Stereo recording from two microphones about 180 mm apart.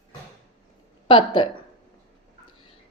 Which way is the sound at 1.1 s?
30° left (ahead or behind).